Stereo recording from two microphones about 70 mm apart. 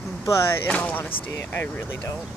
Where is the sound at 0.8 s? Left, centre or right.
Left.